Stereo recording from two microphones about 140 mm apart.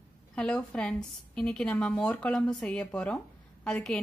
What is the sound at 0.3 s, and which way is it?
A woman's voice, 5° left (ahead or behind).